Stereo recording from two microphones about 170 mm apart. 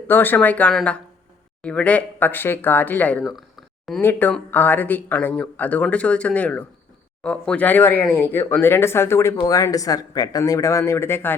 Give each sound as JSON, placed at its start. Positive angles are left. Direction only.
{"t": 0.1, "sound": "speech", "side_deg": 10}